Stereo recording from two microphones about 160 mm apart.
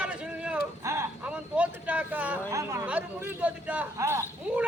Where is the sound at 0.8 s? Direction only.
20° right (ahead or behind).